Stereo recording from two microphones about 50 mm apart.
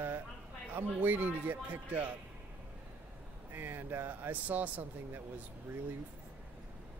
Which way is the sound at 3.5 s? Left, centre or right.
Right.